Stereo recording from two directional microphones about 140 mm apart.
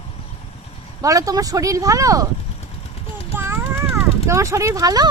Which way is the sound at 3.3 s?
15° right (ahead or behind).